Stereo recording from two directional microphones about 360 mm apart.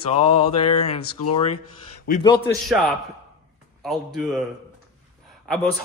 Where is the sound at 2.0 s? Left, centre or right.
Centre.